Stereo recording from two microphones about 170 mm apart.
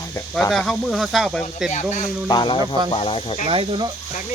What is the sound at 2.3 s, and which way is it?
Speech, 25° left (ahead or behind).